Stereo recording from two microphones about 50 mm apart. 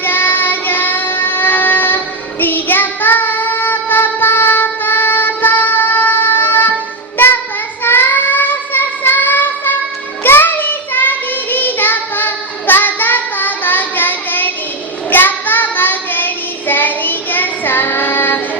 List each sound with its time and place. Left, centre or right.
0.0 s child singing: left
7.9 s child singing: left